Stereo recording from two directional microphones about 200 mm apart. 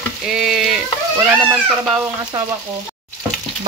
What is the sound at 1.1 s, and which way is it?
Speech, 10° right (ahead or behind).